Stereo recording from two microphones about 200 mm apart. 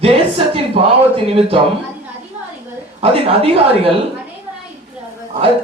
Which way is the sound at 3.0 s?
30° right (ahead or behind).